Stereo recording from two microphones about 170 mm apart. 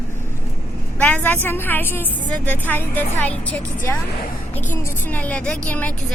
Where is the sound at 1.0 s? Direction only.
10° left (ahead or behind).